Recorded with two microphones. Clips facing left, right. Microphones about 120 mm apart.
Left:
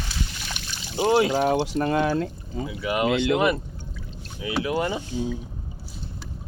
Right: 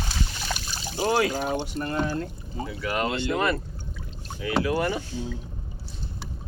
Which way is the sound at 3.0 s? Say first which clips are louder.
Left 5 dB; 80° left.